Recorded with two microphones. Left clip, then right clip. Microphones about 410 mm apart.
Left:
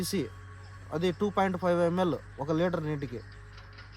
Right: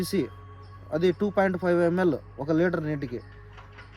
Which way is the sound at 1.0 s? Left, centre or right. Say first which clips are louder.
Right 4 dB; left.